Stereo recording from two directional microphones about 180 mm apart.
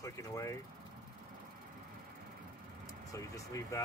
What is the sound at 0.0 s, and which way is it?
Speech, 15° left (ahead or behind).